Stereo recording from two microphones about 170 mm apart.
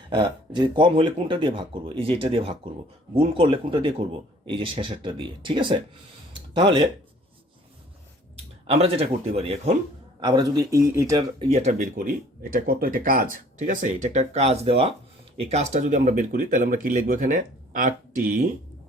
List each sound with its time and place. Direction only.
0.1 s speech: 25° right (ahead or behind)
8.6 s speech: 35° right (ahead or behind)
10.2 s speech: 25° right (ahead or behind)
11.2 s speech: 35° right (ahead or behind)
11.8 s speech: 60° right (ahead or behind)